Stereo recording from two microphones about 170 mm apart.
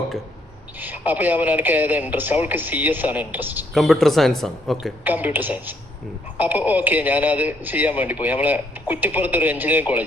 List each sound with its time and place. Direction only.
0.8 s a man's voice: 10° right (ahead or behind)
3.8 s speech: centre (ahead or behind)
5.0 s a man's voice: 10° right (ahead or behind)